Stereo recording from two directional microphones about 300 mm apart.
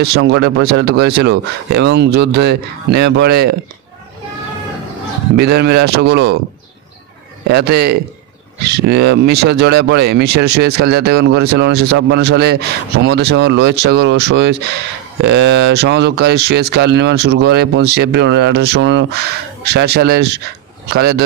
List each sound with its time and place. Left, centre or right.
0.0 s speech: right
5.3 s speech: right
7.4 s speech: right